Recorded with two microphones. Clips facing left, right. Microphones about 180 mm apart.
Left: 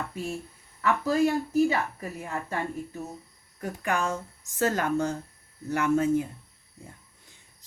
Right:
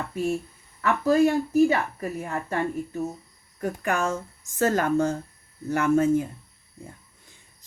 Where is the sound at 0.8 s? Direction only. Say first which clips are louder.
Right 4 dB; 50° right (ahead or behind).